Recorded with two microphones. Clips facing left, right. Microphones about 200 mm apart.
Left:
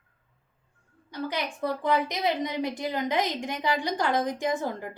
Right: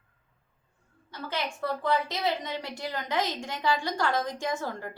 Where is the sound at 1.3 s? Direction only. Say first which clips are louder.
Even; 15° left (ahead or behind).